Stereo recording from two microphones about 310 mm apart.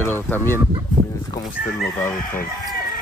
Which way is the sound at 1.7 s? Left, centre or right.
Centre.